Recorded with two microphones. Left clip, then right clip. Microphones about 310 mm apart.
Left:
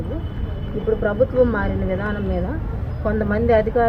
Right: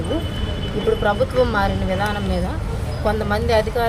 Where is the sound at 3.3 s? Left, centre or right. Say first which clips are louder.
Left 3 dB; right.